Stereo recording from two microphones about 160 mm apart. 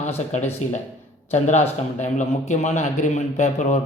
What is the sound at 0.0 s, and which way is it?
A man's voice, 45° left (ahead or behind).